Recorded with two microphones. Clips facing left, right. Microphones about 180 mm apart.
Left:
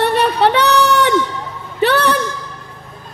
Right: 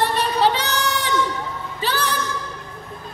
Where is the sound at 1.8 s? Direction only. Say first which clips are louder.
Left 10 dB; 65° left (ahead or behind).